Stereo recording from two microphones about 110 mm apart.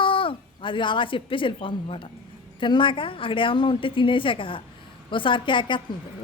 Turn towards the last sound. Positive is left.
turn(degrees=50)  # may be behind; listen again after turning